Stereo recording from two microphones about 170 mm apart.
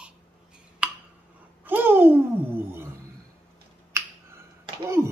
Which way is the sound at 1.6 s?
10° right (ahead or behind).